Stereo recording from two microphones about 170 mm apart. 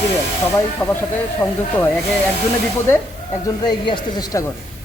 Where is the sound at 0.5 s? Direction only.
15° left (ahead or behind).